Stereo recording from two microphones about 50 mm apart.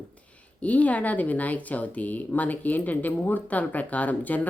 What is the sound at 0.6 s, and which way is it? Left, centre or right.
A woman's voice, left.